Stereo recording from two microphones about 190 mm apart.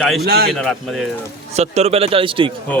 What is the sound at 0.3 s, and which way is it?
Speech, 55° right (ahead or behind).